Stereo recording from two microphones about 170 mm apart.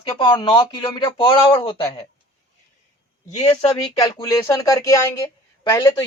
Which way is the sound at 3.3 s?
40° left (ahead or behind).